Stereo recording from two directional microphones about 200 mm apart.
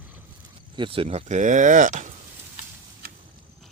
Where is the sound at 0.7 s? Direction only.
25° right (ahead or behind).